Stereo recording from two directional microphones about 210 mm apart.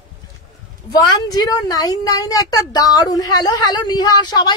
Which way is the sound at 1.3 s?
20° left (ahead or behind).